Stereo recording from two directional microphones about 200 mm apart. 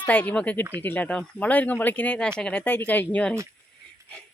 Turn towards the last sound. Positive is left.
turn(degrees=5)  # may be behind; listen again after turning